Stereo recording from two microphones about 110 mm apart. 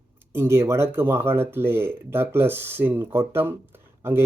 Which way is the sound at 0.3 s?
25° right (ahead or behind).